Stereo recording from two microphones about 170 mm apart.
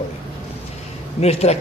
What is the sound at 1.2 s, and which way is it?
Speech, 40° left (ahead or behind).